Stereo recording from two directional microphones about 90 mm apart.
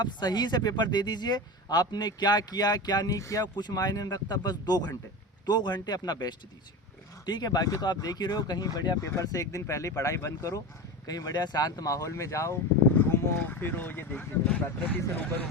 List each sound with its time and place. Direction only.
0.0 s speech: 50° left (ahead or behind)
3.4 s speech: 55° left (ahead or behind); by 12.5 s 35° left (ahead or behind)
13.0 s speech: 20° left (ahead or behind)